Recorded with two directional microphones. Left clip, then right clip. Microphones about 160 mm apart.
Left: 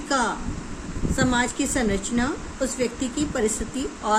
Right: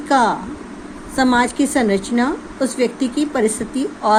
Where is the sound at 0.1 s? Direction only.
40° right (ahead or behind).